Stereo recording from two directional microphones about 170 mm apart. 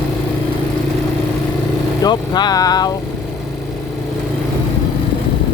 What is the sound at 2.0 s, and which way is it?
Speech, 25° left (ahead or behind).